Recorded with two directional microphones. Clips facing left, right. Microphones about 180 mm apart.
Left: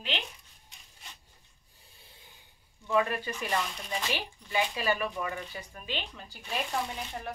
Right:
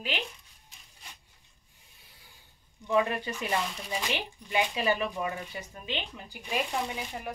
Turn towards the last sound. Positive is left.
turn(degrees=-15)  # may be behind; listen again after turning